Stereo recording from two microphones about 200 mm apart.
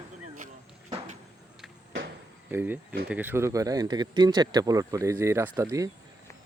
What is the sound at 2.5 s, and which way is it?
Speech, 10° right (ahead or behind).